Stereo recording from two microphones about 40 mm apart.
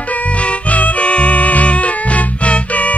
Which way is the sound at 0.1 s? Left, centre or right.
Left.